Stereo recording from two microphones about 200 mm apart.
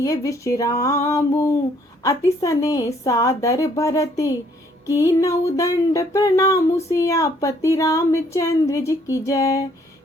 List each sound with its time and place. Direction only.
0.0 s speech: 15° left (ahead or behind)